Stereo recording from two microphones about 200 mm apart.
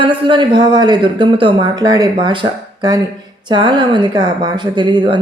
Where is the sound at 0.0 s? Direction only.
25° right (ahead or behind).